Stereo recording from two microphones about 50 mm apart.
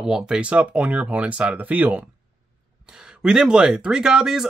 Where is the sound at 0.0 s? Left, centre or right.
Centre.